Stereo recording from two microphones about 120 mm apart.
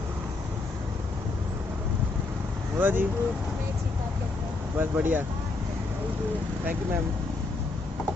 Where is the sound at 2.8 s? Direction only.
15° right (ahead or behind).